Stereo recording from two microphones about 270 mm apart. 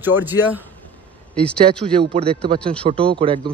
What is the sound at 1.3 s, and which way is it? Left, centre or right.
Speech, centre.